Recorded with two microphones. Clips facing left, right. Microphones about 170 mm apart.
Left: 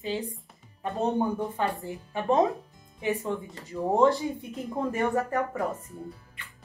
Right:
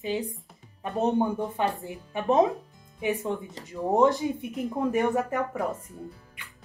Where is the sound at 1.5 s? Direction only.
15° right (ahead or behind).